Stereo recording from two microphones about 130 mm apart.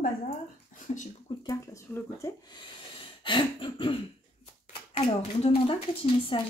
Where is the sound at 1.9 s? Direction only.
25° left (ahead or behind).